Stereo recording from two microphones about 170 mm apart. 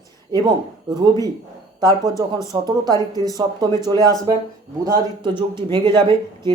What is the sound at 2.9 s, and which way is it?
Speech, 20° left (ahead or behind).